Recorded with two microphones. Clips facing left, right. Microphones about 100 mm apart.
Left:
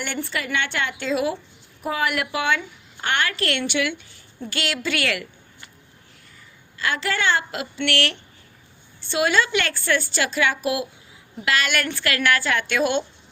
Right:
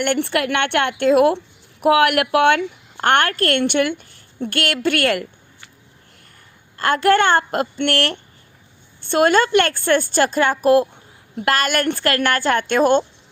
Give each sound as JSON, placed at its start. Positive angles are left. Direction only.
{"t": 0.0, "sound": "a woman's voice", "side_deg": -65}
{"t": 1.8, "sound": "a woman's voice", "side_deg": -70}
{"t": 6.7, "sound": "a woman's voice", "side_deg": -50}